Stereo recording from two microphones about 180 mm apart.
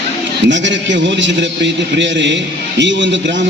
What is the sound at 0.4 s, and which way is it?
A man's voice, 85° right.